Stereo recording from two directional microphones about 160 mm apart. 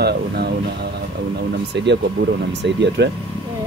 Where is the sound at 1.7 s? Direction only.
90° right.